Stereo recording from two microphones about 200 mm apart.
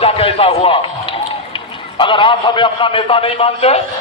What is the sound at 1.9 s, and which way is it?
A man's voice, 25° left (ahead or behind).